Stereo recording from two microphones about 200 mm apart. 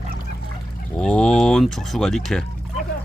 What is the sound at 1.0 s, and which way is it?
Speech, 5° left (ahead or behind).